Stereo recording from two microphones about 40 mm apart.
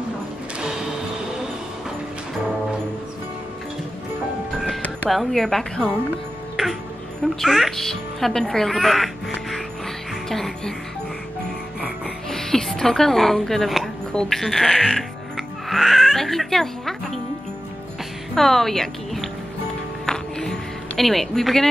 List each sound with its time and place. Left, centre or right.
0.6 s a sound: centre
5.1 s a woman's voice: centre
5.4 s speech: centre
6.5 s music: centre
7.4 s a woman's voice: centre
7.7 s speech: centre
10.3 s speech: centre
12.3 s speech: centre
14.9 s music: centre
18.3 s speech: centre
20.1 s music: centre
21.0 s a woman's voice: centre